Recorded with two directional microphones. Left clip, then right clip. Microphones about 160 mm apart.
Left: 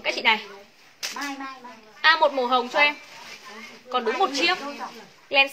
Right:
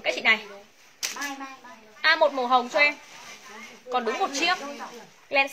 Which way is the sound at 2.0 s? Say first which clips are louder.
Left 2 dB; 20° left (ahead or behind).